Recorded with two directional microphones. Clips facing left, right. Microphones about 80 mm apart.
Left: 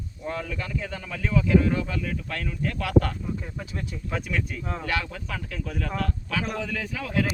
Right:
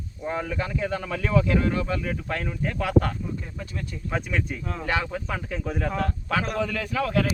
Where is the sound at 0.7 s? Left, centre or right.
Right.